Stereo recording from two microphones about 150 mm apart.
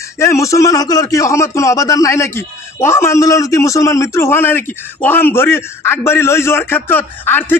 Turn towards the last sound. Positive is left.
turn(degrees=15)  # may be behind; listen again after turning